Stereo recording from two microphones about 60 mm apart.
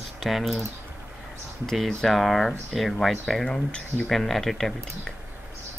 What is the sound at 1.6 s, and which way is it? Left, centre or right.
Speech, centre.